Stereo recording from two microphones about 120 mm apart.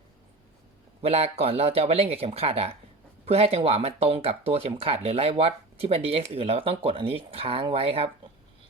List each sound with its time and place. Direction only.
1.0 s speech: 60° right (ahead or behind)